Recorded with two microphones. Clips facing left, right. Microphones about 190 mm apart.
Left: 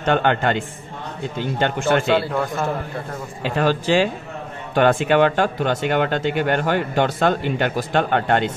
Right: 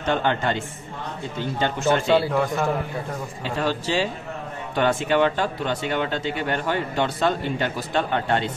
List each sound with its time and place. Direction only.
0.0 s speech: 60° left (ahead or behind)
2.3 s a man's voice: centre (ahead or behind)
3.5 s speech: 60° left (ahead or behind)